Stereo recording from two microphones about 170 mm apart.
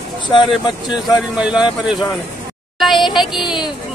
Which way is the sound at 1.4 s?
5° right (ahead or behind).